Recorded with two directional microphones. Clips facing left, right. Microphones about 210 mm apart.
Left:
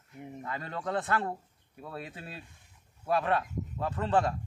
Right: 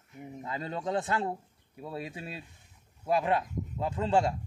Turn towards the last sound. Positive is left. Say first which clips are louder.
# right 1 dB
turn(degrees=-15)  # may be behind; listen again after turning